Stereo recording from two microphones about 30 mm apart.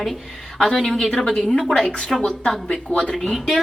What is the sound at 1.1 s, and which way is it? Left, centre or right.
Speech, left.